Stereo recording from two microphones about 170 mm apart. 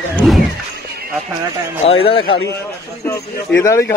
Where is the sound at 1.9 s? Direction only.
35° left (ahead or behind).